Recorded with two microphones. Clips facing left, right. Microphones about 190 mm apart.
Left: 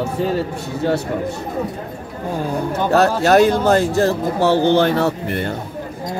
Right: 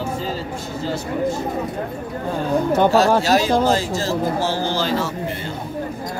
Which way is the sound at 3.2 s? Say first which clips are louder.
Left 4 dB; 60° left (ahead or behind).